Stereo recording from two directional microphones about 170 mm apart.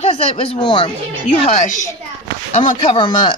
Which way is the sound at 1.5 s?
45° left (ahead or behind).